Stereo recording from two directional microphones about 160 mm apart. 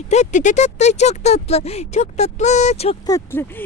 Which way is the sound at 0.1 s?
50° left (ahead or behind).